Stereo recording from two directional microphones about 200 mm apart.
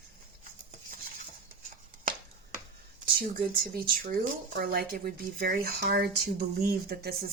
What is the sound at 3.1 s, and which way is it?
Speech, 50° right (ahead or behind).